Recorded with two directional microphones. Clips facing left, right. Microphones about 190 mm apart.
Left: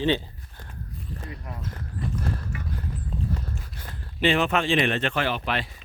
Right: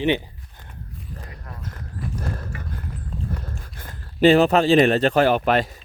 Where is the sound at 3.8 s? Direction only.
50° right (ahead or behind).